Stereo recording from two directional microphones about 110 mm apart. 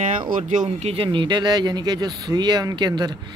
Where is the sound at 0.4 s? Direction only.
80° right.